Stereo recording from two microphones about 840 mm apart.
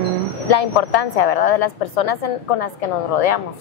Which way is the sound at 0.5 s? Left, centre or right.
Left.